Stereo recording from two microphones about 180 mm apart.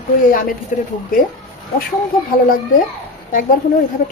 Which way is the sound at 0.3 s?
50° left (ahead or behind).